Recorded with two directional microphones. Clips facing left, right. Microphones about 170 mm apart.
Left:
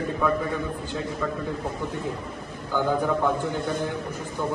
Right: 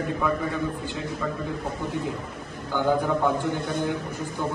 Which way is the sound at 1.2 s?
5° right (ahead or behind).